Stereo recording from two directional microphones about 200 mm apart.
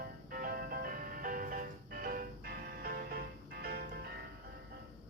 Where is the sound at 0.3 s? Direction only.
50° right (ahead or behind).